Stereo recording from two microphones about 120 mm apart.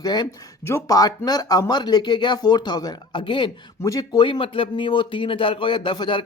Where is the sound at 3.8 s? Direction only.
30° left (ahead or behind).